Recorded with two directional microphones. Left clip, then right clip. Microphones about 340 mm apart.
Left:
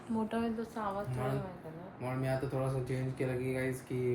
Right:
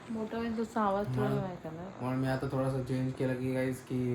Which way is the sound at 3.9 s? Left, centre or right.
Centre.